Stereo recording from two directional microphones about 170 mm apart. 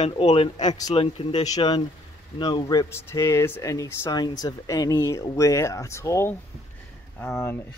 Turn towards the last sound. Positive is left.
turn(degrees=15)  # may be behind; listen again after turning